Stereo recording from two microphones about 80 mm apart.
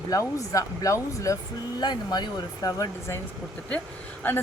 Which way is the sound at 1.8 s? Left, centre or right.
Left.